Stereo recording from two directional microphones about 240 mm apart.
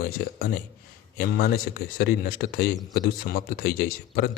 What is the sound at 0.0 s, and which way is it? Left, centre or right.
Speech, left.